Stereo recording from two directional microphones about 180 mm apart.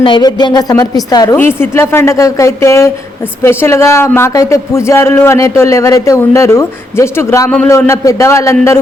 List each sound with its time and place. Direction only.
0.0 s speech: 25° left (ahead or behind)